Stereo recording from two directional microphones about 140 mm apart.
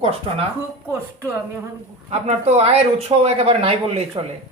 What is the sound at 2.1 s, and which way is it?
Speech, 50° right (ahead or behind).